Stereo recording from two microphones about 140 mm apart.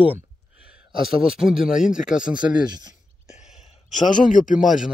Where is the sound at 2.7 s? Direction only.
30° right (ahead or behind).